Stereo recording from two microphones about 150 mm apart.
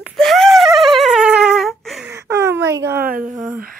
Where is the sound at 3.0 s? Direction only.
70° right (ahead or behind).